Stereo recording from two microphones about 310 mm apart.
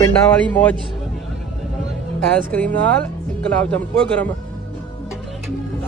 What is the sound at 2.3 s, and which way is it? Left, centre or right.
Speech, centre.